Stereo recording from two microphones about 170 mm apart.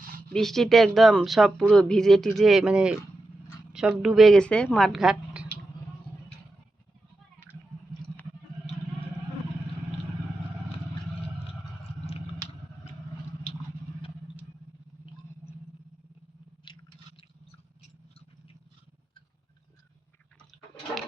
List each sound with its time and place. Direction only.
0.3 s speech: centre (ahead or behind)
11.8 s a sound: 35° left (ahead or behind)
16.7 s squish: 25° left (ahead or behind)